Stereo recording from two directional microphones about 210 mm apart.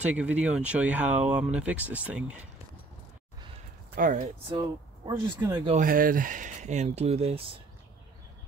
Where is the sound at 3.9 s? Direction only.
40° right (ahead or behind).